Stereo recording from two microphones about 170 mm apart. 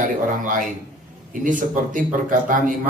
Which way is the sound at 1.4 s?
50° right (ahead or behind).